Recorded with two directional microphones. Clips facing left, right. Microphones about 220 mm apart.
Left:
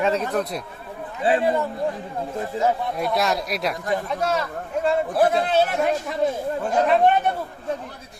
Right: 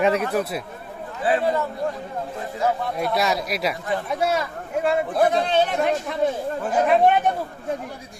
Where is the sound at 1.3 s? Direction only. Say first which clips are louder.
Left 1 dB; 25° left (ahead or behind).